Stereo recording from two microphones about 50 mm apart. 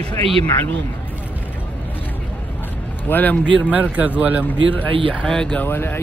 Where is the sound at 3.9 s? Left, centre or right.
Right.